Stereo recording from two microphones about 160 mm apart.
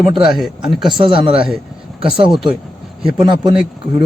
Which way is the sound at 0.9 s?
30° right (ahead or behind).